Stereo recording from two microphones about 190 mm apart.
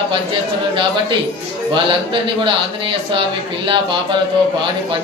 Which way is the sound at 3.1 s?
25° right (ahead or behind).